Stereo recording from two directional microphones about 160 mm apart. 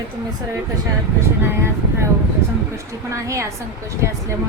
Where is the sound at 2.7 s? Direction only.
20° right (ahead or behind).